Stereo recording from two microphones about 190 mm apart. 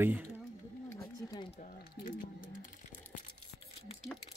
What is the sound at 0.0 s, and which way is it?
Speech, 10° right (ahead or behind).